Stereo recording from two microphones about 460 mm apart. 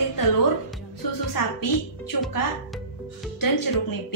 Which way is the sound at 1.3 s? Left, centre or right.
Left.